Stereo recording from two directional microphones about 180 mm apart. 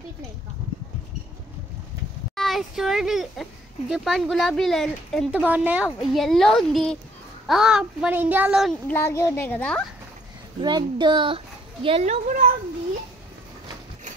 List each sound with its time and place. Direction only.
2.3 s speech: centre (ahead or behind)
8.8 s a child's voice: 15° left (ahead or behind)
10.6 s a child's voice: 25° right (ahead or behind); by 12.5 s 40° right (ahead or behind)